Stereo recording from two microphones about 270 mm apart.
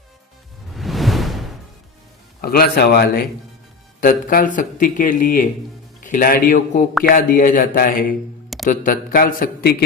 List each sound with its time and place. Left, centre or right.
0.7 s whoosh: centre
2.4 s speech: left